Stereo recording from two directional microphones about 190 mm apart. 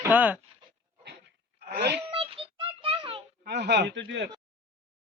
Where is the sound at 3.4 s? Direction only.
60° right (ahead or behind).